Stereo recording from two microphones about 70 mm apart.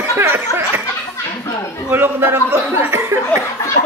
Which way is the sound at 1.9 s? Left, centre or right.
Right.